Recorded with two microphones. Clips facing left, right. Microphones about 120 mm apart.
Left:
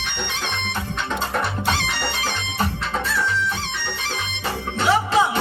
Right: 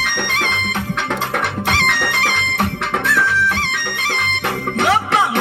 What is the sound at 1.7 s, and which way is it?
Music, 65° right (ahead or behind).